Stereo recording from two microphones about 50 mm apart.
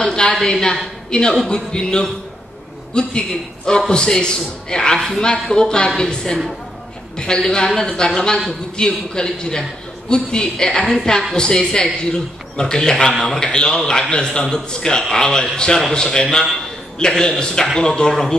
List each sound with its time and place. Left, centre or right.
0.0 s a sound: centre
0.5 s a man's voice: centre
13.2 s a man's voice: left